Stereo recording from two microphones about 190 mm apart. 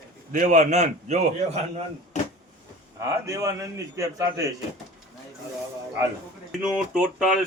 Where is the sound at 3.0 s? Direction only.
20° right (ahead or behind).